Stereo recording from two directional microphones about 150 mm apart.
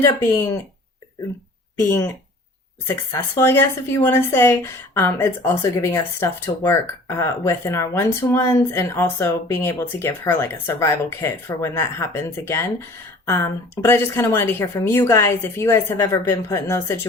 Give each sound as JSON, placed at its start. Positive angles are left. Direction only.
{"t": 0.0, "sound": "speech", "side_deg": 20}
{"t": 1.9, "sound": "speech", "side_deg": 15}
{"t": 13.8, "sound": "speech", "side_deg": 15}